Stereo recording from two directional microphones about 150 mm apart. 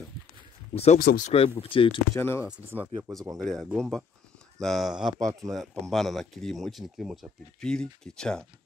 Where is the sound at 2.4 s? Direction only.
10° right (ahead or behind).